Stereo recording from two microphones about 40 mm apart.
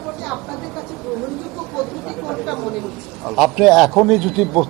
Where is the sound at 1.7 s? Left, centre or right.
Centre.